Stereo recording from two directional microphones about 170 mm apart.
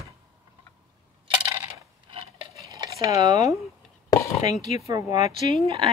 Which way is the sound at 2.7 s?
20° right (ahead or behind).